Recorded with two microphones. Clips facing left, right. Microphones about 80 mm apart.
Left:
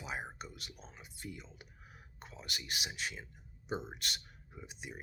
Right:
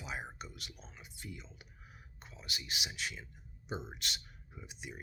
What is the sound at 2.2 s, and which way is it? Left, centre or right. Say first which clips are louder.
Speech: left 1 dB; left.